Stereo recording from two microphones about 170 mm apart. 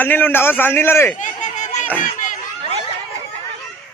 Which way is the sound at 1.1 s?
45° left (ahead or behind).